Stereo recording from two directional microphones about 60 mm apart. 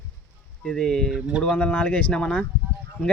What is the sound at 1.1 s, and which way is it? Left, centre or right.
Speech, centre.